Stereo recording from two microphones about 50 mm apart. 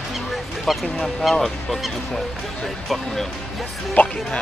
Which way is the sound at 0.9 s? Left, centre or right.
Centre.